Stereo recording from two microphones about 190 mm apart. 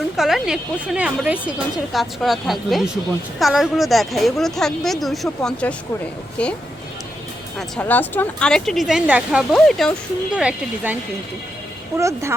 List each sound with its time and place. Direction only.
0.2 s speech: centre (ahead or behind)
7.8 s speech: 10° left (ahead or behind); by 10.9 s 5° right (ahead or behind)
11.9 s speech: 15° right (ahead or behind)